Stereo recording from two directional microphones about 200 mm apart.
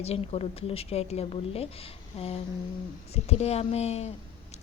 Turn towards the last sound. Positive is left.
turn(degrees=35)  # may be behind; listen again after turning